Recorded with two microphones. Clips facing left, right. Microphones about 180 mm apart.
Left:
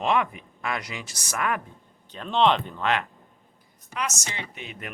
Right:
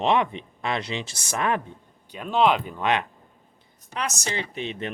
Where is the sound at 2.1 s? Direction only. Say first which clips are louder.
Right 1 dB; 10° right (ahead or behind).